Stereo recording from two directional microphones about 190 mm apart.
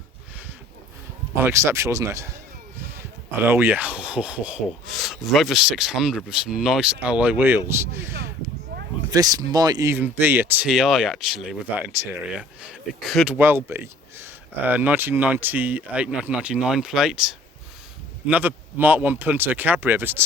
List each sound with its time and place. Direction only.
1.5 s speech: 15° right (ahead or behind)
3.4 s speech: 10° right (ahead or behind)